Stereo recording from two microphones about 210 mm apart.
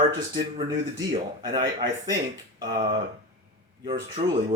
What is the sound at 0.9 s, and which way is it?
Speech, 20° right (ahead or behind).